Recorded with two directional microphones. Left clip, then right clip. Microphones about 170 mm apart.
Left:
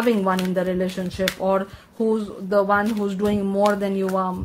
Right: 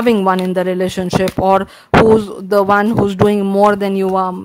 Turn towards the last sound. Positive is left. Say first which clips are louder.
# right 8 dB
turn(degrees=-40)  # may be behind; listen again after turning